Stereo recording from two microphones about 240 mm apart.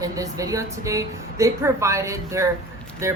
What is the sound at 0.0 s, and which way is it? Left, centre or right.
A woman's voice, centre.